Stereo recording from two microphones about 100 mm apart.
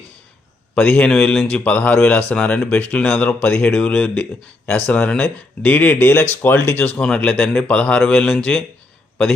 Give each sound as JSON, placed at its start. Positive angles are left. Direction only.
{"t": 0.8, "sound": "speech", "side_deg": 15}
{"t": 3.7, "sound": "speech", "side_deg": 5}
{"t": 7.0, "sound": "speech", "side_deg": 10}